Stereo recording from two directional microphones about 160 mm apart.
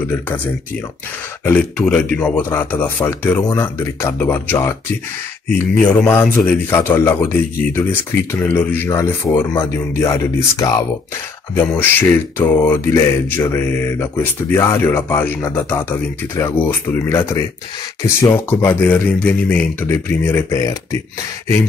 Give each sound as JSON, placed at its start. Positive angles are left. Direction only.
{"t": 1.4, "sound": "speech", "side_deg": 10}